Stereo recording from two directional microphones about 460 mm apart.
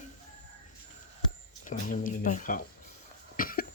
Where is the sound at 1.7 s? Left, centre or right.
Centre.